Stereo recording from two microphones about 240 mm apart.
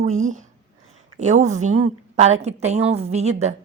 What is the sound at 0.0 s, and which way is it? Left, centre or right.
A woman's voice, right.